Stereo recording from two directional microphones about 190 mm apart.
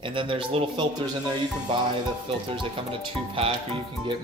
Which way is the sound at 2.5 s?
30° right (ahead or behind).